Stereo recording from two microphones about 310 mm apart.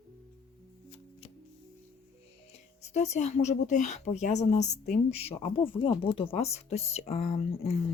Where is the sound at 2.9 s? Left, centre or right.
Left.